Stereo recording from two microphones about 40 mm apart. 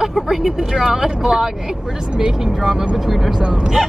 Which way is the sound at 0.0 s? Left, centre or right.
Centre.